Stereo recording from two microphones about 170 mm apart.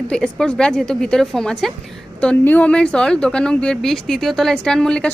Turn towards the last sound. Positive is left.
turn(degrees=5)  # may be behind; listen again after turning